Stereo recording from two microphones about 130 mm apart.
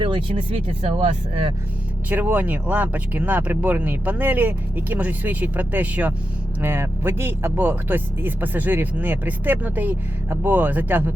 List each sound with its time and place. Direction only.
0.0 s speech: 40° right (ahead or behind)
2.0 s speech: 15° right (ahead or behind)